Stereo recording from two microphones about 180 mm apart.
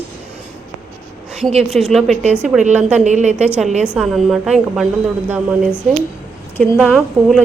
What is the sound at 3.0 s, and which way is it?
Speech, 40° right (ahead or behind).